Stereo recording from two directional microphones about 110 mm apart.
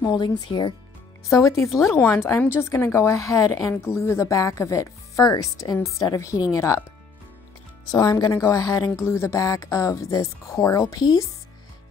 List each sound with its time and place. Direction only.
0.0 s speech: 40° left (ahead or behind)
1.4 s speech: 25° left (ahead or behind)
7.9 s speech: 40° left (ahead or behind)